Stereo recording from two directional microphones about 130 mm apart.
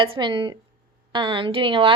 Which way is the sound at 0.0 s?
40° right (ahead or behind).